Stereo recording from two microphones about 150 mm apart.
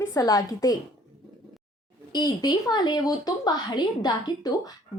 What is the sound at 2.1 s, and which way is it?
Speech, 30° left (ahead or behind).